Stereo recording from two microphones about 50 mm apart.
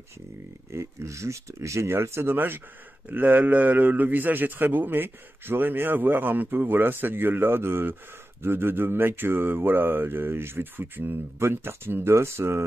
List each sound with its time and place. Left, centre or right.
0.7 s speech: right
2.3 s mantra: right
3.1 s a man's voice: right
8.4 s mantra: right